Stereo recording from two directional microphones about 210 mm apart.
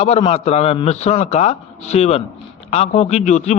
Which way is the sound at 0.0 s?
30° left (ahead or behind).